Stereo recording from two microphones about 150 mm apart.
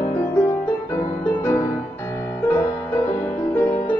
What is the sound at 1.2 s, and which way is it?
Music, 15° left (ahead or behind).